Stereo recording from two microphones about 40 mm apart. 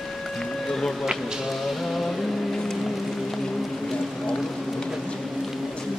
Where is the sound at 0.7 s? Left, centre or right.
Centre.